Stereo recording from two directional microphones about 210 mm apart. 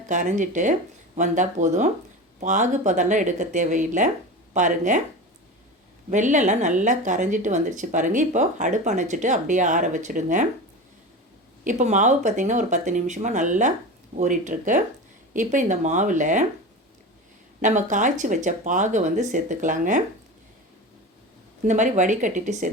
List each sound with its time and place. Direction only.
0.1 s speech: 35° right (ahead or behind)
6.1 s speech: 35° right (ahead or behind)
11.6 s speech: 35° right (ahead or behind)
17.6 s speech: 35° right (ahead or behind)
21.6 s speech: 35° right (ahead or behind)